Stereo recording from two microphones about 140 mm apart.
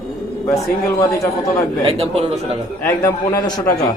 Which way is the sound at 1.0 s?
25° left (ahead or behind).